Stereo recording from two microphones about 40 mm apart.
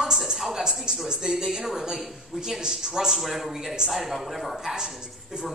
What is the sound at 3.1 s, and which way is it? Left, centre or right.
Speech, centre.